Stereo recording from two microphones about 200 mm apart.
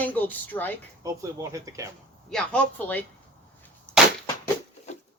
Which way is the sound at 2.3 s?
5° left (ahead or behind).